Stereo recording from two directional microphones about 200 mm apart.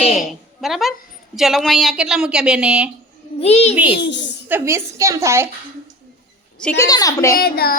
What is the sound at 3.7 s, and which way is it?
A woman's voice, 5° right (ahead or behind).